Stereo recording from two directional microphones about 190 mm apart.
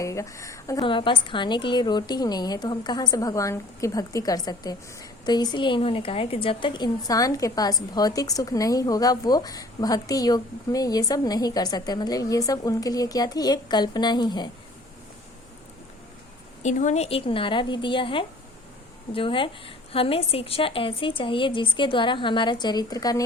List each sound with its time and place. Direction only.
0.0 s a woman's voice: 15° left (ahead or behind)
16.6 s a woman's voice: 35° left (ahead or behind); by 23.2 s 20° left (ahead or behind)